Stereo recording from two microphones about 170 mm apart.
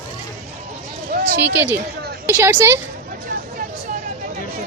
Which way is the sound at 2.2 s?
15° right (ahead or behind).